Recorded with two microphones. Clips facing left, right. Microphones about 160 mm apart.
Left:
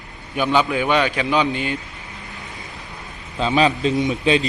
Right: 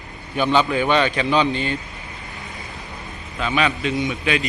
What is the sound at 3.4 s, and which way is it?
A man's voice, 30° left (ahead or behind).